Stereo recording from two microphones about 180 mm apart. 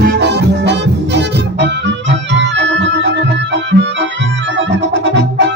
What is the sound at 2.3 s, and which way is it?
Music, 85° right.